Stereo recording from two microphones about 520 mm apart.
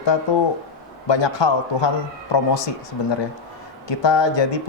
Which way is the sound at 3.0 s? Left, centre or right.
Left.